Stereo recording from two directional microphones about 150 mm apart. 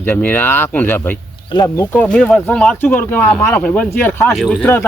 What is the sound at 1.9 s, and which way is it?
Speech, 10° left (ahead or behind).